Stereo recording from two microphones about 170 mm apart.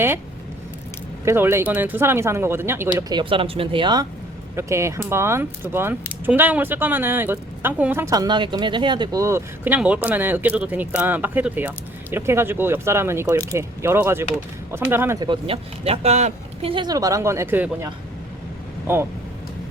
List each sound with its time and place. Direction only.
1.2 s speech: 15° right (ahead or behind)
3.1 s speech: 30° right (ahead or behind)
4.5 s speech: 15° right (ahead or behind)
15.2 s speech: 30° right (ahead or behind); by 17.8 s 15° right (ahead or behind)